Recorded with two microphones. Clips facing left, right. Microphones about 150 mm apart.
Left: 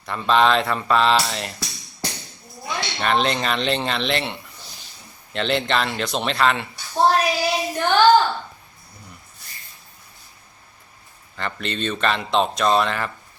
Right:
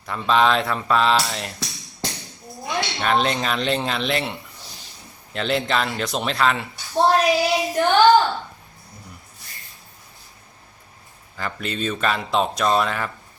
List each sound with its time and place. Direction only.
0.0 s speech: centre (ahead or behind)
2.6 s speech: centre (ahead or behind)
7.0 s a sound: centre (ahead or behind)
7.3 s child singing: centre (ahead or behind)
7.9 s a sound: 20° right (ahead or behind)
11.3 s speech: 5° right (ahead or behind)